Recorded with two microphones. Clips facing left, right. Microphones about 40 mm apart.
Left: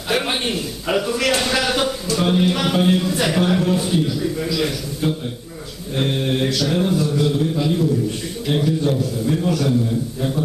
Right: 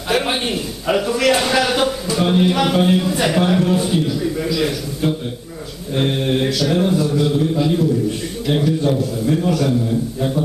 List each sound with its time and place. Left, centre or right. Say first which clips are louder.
0.1 s a man's voice: right 2 dB; centre
5.9 s mantra: right 2 dB; centre
8.4 s a man's voice: right 2 dB; centre